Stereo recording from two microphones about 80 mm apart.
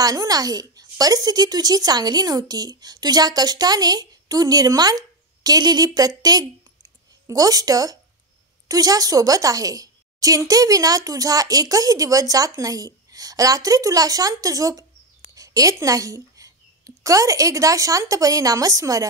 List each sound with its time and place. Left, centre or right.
0.0 s a woman's voice: right